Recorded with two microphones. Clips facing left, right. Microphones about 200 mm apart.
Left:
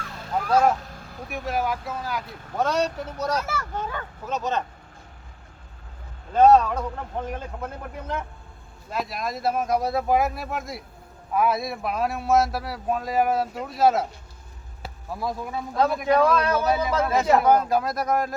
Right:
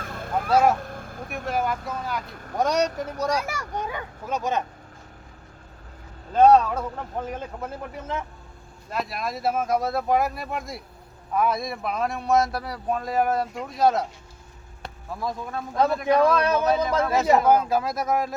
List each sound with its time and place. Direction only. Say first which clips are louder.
0.1 s honk: right 3 dB; 55° right (ahead or behind)
0.5 s speech: right 1 dB; 10° right (ahead or behind)
0.8 s vehicle: right 5 dB; 55° right (ahead or behind)
1.3 s speech: even; centre (ahead or behind)
2.6 s speech: right 1 dB; 15° right (ahead or behind)
6.3 s speech: even; centre (ahead or behind)